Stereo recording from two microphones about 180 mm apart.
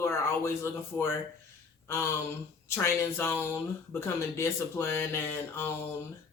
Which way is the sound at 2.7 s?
15° left (ahead or behind).